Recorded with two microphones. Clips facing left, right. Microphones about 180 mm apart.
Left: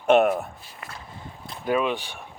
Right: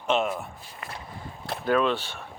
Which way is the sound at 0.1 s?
60° left (ahead or behind).